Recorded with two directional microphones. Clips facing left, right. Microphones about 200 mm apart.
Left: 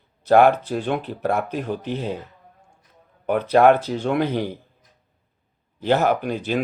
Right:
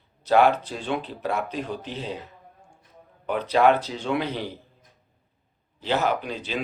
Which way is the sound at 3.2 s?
55° left (ahead or behind).